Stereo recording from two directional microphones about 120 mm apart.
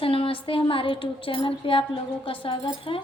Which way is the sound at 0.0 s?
50° left (ahead or behind).